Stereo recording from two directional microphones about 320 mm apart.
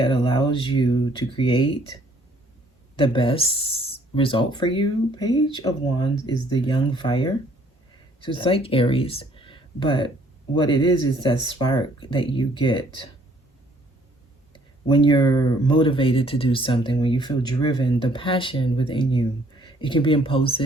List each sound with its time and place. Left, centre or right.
0.0 s speech: centre
2.9 s speech: centre
14.5 s speech: centre